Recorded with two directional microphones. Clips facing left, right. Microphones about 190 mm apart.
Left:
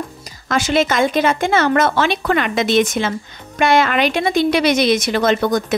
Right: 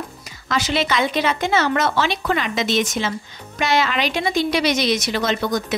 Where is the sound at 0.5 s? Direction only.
50° left (ahead or behind).